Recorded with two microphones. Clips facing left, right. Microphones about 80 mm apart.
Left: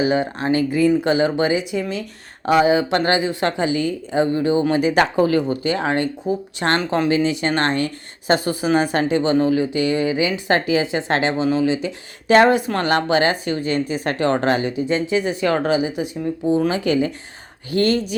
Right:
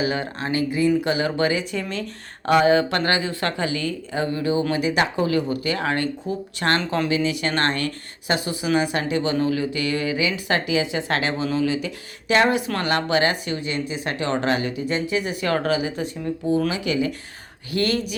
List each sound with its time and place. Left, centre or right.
0.0 s a woman's voice: left
1.8 s a woman's voice: centre; by 7.1 s left
7.1 s speech: left
7.5 s a woman's voice: left
8.3 s a woman's voice: left; by 16.0 s centre
16.6 s a woman's voice: left